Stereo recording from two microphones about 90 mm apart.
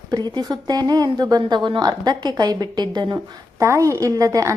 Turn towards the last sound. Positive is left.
turn(degrees=-40)  # may be behind; listen again after turning